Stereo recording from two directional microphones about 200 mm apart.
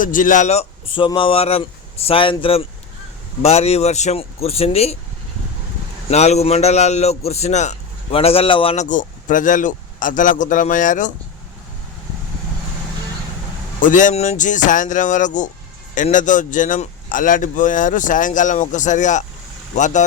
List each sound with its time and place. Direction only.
0.0 s a man's voice: 40° left (ahead or behind)
6.1 s a man's voice: 35° left (ahead or behind)
13.7 s a man's voice: 40° left (ahead or behind)